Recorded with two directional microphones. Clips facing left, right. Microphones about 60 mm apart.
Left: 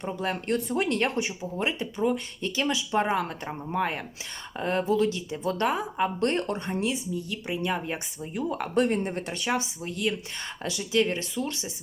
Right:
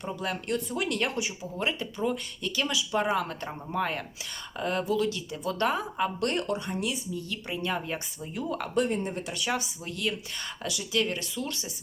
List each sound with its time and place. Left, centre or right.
0.0 s speech: left
1.5 s speech: left
7.4 s speech: centre
8.7 s speech: left
9.5 s speech: left